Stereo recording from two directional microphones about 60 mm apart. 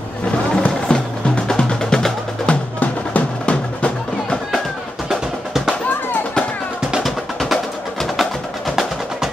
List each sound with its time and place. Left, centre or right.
0.6 s music: centre
2.4 s music: left
5.1 s music: centre
7.0 s music: centre